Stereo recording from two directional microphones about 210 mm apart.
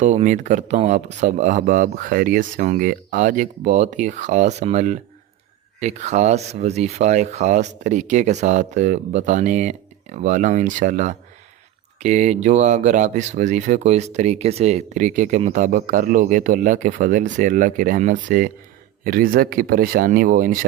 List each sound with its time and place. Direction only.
0.0 s speech: 35° right (ahead or behind)